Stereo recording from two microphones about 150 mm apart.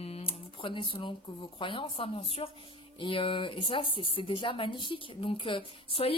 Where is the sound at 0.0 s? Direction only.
40° left (ahead or behind).